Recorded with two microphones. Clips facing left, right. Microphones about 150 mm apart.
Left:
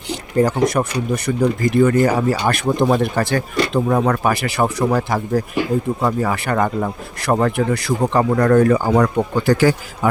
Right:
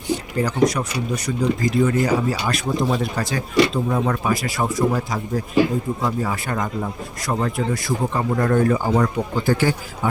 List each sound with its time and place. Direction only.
0.3 s speech: 50° left (ahead or behind); by 5.4 s 80° left
6.0 s speech: 70° left (ahead or behind); by 10.1 s 90° left